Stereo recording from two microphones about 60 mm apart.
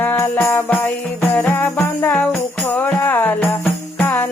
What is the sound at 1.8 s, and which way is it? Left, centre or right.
Music, left.